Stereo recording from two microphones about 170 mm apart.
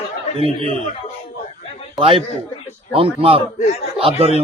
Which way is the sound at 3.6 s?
40° left (ahead or behind).